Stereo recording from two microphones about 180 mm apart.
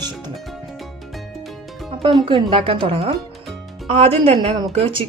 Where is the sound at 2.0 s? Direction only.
30° right (ahead or behind).